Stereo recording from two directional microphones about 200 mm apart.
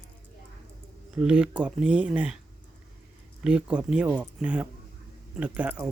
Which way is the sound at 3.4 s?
5° right (ahead or behind).